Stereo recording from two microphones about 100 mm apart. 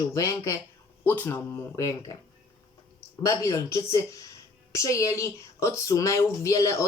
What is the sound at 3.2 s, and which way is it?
A woman's voice, 35° left (ahead or behind).